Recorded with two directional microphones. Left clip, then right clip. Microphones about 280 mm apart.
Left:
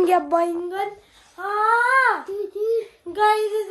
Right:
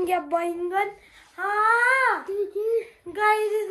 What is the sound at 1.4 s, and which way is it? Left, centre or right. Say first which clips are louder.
A child's voice: left 1 dB; centre.